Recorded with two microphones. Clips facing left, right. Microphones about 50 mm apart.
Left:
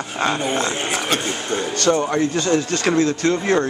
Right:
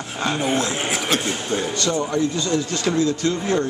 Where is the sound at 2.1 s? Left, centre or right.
Left.